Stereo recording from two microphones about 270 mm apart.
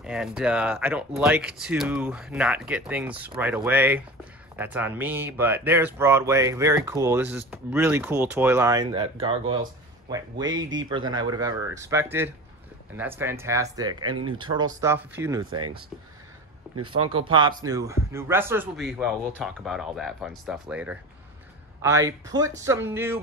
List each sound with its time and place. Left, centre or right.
0.0 s speech: centre
15.4 s speech: right
16.7 s speech: right
17.3 s speech: centre